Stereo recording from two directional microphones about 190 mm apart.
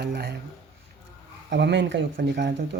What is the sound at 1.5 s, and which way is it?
Speech, 65° right (ahead or behind).